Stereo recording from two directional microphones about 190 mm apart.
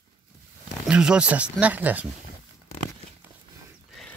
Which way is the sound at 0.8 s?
5° right (ahead or behind).